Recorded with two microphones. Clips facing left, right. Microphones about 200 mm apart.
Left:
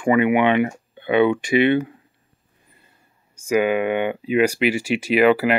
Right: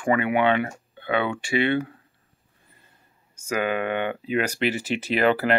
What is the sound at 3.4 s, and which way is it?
Speech, 10° left (ahead or behind).